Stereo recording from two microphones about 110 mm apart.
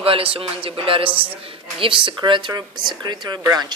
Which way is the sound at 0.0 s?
60° right (ahead or behind).